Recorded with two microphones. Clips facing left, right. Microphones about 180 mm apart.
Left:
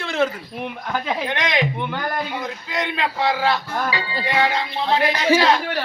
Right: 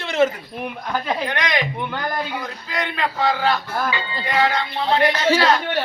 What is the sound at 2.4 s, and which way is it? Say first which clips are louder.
Speech: left 1 dB; 20° left (ahead or behind).